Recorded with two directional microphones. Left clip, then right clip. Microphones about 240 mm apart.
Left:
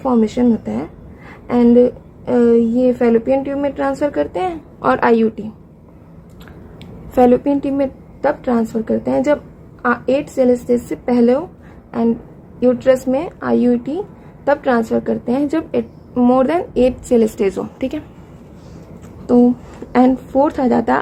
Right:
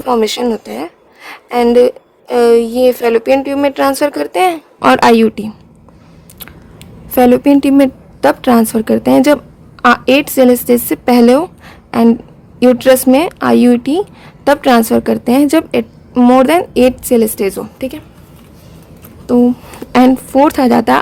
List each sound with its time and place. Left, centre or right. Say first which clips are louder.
0.1 s a woman's voice: right 5 dB; right
7.1 s a woman's voice: right 4 dB; right
11.9 s a sound: right 7 dB; right
12.5 s a woman's voice: right 5 dB; right
19.2 s a woman's voice: right 2 dB; right